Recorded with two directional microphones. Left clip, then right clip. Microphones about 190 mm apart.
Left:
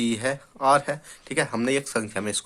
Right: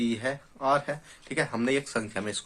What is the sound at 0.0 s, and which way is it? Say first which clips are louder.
Speech: left 4 dB; 40° left (ahead or behind).